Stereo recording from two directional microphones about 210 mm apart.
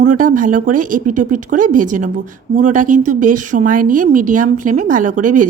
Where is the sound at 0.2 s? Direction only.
40° right (ahead or behind).